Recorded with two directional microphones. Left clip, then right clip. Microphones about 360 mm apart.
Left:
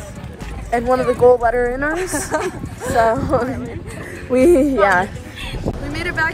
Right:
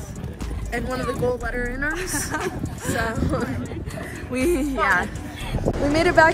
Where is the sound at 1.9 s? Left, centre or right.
Centre.